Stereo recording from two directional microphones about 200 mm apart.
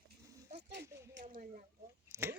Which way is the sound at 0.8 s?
15° right (ahead or behind).